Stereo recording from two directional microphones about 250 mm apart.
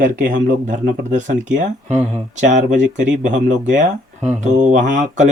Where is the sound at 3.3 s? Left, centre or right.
Right.